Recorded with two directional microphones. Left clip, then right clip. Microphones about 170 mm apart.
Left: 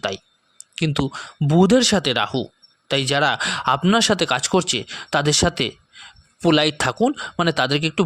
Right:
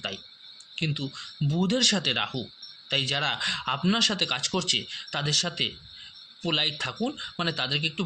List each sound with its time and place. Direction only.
0.8 s speech: 80° left